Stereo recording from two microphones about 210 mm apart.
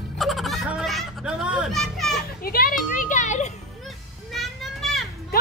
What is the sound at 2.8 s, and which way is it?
Music, 40° left (ahead or behind).